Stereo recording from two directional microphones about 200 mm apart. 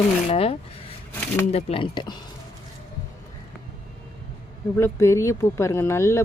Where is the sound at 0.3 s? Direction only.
30° left (ahead or behind).